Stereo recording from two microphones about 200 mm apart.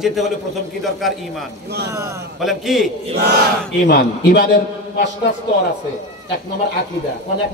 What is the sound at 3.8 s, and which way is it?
Speech, 55° left (ahead or behind).